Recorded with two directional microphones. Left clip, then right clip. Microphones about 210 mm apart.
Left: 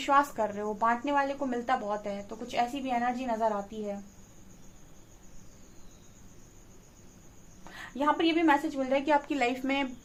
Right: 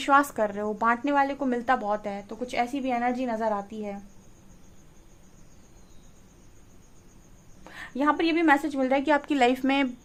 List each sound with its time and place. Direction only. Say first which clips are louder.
0.0 s a woman's voice: right 4 dB; 50° right (ahead or behind)
7.7 s a woman's voice: right 3 dB; 45° right (ahead or behind)